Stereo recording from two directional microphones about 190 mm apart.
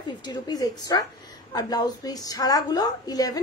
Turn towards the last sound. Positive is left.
turn(degrees=20)  # may be behind; listen again after turning